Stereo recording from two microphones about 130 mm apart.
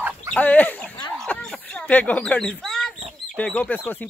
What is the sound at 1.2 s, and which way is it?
Bird, 10° left (ahead or behind).